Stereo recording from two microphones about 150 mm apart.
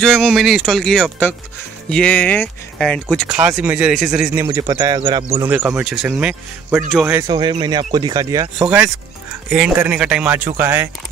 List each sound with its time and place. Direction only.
0.0 s speech: centre (ahead or behind)
3.3 s speech: 10° right (ahead or behind)
4.5 s speech: 25° right (ahead or behind)
5.4 s speech: 15° right (ahead or behind)
7.2 s speech: 30° right (ahead or behind)
8.6 s speech: 5° right (ahead or behind)